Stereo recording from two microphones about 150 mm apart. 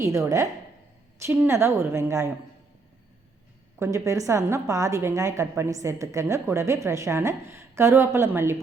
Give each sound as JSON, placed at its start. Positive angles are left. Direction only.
{"t": 0.0, "sound": "a woman's voice", "side_deg": -20}
{"t": 3.8, "sound": "a woman's voice", "side_deg": -20}